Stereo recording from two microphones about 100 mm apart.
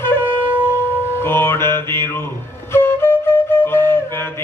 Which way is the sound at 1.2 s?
25° left (ahead or behind).